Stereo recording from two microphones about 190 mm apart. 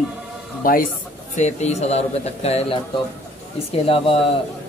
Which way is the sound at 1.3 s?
35° left (ahead or behind).